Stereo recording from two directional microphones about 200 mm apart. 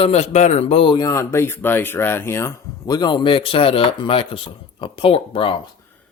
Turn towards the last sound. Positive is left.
turn(degrees=25)  # may be behind; listen again after turning